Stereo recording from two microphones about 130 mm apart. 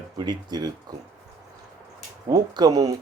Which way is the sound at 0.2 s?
35° right (ahead or behind).